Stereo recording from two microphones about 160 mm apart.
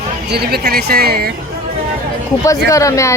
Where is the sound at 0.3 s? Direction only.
85° right.